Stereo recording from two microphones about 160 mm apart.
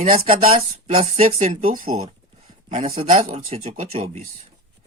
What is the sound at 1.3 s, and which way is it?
Speech, 55° right (ahead or behind).